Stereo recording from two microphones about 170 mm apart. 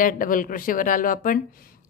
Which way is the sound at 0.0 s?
55° left (ahead or behind).